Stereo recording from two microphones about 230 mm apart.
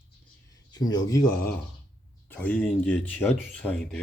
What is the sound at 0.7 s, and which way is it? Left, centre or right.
Speech, centre.